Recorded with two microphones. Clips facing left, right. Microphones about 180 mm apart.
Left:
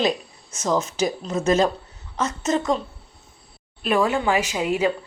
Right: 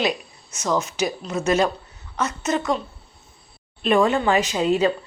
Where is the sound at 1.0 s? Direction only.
25° left (ahead or behind).